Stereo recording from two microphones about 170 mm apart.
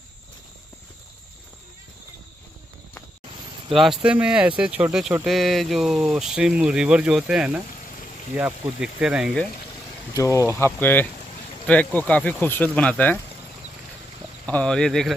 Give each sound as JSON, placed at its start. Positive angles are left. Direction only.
{"t": 3.7, "sound": "speech", "side_deg": 0}
{"t": 10.1, "sound": "speech", "side_deg": 15}
{"t": 14.4, "sound": "speech", "side_deg": 5}